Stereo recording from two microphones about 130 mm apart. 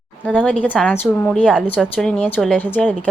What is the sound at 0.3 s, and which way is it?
A woman's voice, 10° left (ahead or behind).